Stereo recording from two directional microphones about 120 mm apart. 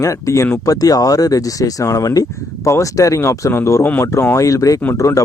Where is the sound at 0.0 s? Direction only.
25° left (ahead or behind).